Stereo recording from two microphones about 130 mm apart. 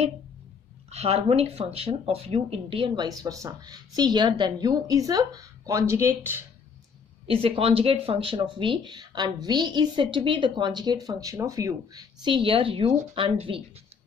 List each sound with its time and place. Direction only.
0.8 s speech: 55° right (ahead or behind)
3.1 s a woman's voice: 25° right (ahead or behind)
7.2 s speech: 45° right (ahead or behind)